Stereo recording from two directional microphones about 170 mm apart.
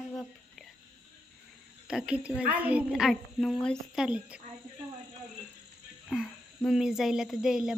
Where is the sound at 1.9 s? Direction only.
5° right (ahead or behind).